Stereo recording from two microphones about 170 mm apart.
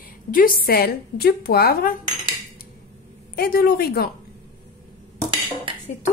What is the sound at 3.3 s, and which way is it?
Speech, 60° left (ahead or behind).